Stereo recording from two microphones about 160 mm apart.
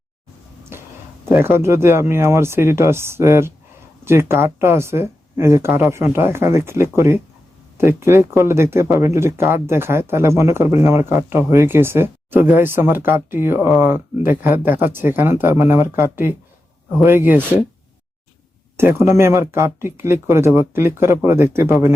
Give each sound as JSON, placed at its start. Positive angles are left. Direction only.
{"t": 1.2, "sound": "speech", "side_deg": -15}
{"t": 18.8, "sound": "speech", "side_deg": -15}